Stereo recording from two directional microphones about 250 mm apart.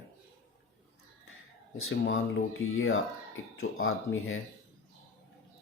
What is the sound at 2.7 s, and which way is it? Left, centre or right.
Speech, left.